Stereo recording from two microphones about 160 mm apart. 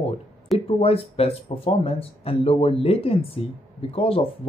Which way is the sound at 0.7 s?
35° left (ahead or behind).